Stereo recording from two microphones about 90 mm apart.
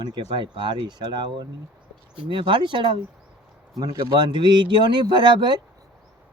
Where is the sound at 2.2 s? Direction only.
70° right (ahead or behind).